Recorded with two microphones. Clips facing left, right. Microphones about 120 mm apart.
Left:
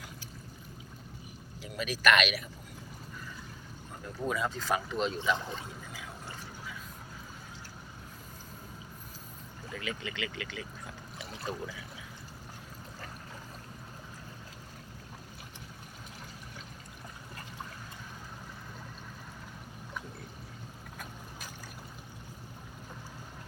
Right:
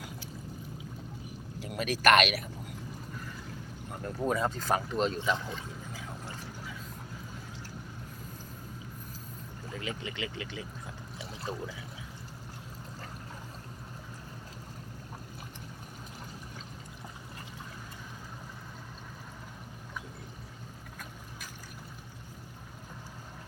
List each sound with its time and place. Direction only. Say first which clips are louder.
1.5 s speech: right 3 dB; 50° right (ahead or behind)
4.3 s speech: right 2 dB; 40° right (ahead or behind)
9.7 s speech: even; 25° right (ahead or behind)